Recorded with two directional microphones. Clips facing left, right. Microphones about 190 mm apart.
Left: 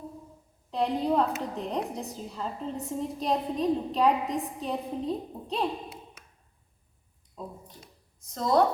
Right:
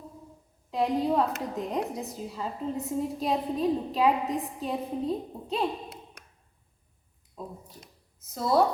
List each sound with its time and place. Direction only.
0.7 s a woman's voice: 5° right (ahead or behind)
8.2 s a woman's voice: 5° right (ahead or behind)